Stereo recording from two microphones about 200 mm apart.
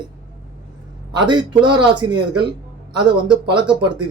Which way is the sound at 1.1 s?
20° right (ahead or behind).